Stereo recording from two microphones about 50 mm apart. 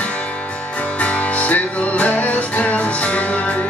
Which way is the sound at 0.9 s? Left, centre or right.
Left.